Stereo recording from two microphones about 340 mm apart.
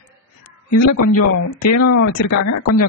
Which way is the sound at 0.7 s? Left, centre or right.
Left.